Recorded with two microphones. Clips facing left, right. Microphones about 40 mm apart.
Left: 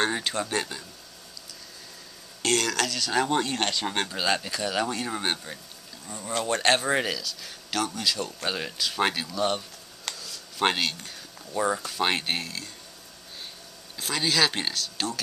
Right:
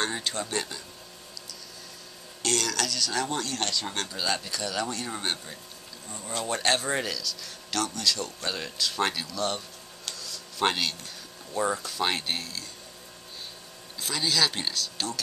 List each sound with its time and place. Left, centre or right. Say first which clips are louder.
0.0 s a man's voice: left 3 dB; centre
2.4 s speech: left 3 dB; centre; by 4.2 s left
4.2 s speech: left 2 dB; centre
10.1 s a sound: even; centre
10.6 s speech: left 2 dB; centre
13.9 s speech: left 2 dB; centre